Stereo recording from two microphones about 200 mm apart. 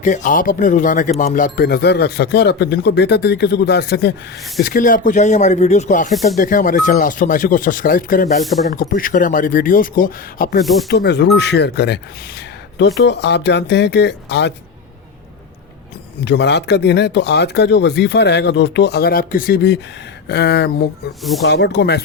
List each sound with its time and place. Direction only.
0.0 s speech: 40° left (ahead or behind); by 4.1 s 55° left (ahead or behind)
4.6 s speech: 45° left (ahead or behind)
10.8 s speech: 55° left (ahead or behind)
13.0 s speech: 60° left (ahead or behind)
16.2 s speech: 60° left (ahead or behind)